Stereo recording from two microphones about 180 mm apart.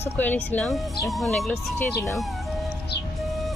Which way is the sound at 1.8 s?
15° left (ahead or behind).